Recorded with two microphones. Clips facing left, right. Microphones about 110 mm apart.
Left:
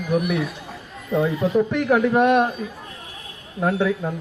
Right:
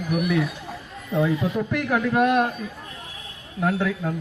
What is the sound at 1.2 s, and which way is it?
Speech, 20° left (ahead or behind).